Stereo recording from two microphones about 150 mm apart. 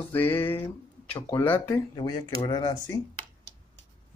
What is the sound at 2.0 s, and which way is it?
Speech, 30° left (ahead or behind).